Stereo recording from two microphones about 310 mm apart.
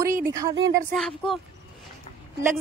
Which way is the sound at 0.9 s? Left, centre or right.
Centre.